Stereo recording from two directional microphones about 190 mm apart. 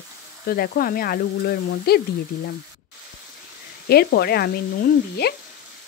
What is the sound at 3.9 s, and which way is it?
Speech, 55° left (ahead or behind).